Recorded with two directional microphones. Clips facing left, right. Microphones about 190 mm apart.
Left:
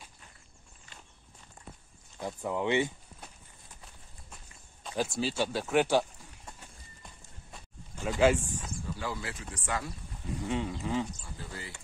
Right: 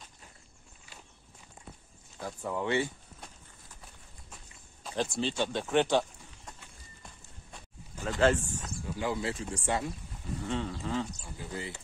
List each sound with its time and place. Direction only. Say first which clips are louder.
2.1 s speech: left 2 dB; 15° left (ahead or behind)
4.9 s speech: even; 5° left (ahead or behind)
8.0 s speech: left 1 dB; 10° left (ahead or behind)
8.8 s speech: right 6 dB; 20° right (ahead or behind)
10.4 s speech: left 1 dB; 15° left (ahead or behind)
11.2 s speech: right 4 dB; 15° right (ahead or behind)